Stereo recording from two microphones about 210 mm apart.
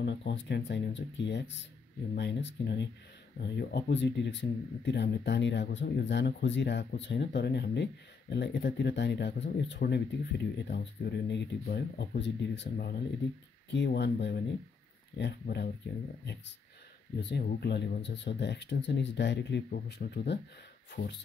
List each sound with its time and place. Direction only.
0.0 s speech: 55° left (ahead or behind)
17.2 s speech: 50° left (ahead or behind)